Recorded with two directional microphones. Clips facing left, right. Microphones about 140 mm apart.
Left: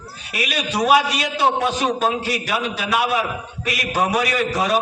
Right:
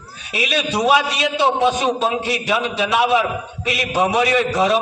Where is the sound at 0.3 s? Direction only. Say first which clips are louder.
Right 2 dB; 25° right (ahead or behind).